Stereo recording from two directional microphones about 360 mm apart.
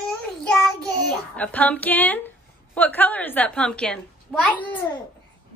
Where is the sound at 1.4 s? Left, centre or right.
Centre.